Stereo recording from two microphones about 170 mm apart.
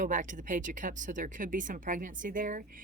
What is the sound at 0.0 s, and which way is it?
Speech, 50° right (ahead or behind).